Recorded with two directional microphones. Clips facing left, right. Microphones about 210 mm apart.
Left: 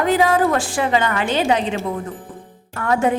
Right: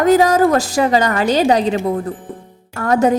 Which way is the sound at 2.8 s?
40° right (ahead or behind).